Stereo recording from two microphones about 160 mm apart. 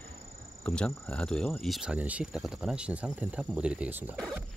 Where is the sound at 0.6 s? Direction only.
5° left (ahead or behind).